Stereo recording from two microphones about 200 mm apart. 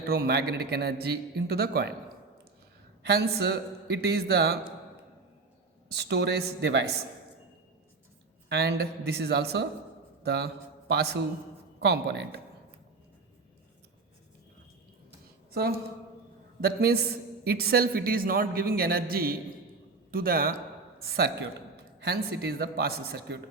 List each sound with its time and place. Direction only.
0.0 s a man's voice: 50° right (ahead or behind)
3.0 s a man's voice: 55° right (ahead or behind)
5.9 s speech: 55° right (ahead or behind)
8.4 s a man's voice: 55° right (ahead or behind)
16.6 s a man's voice: 50° right (ahead or behind)